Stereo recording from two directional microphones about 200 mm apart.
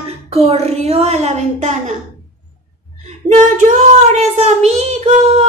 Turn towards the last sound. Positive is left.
turn(degrees=-35)  # may be behind; listen again after turning